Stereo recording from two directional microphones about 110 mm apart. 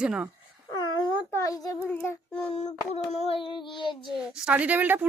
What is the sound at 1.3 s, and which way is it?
Speech, 30° left (ahead or behind).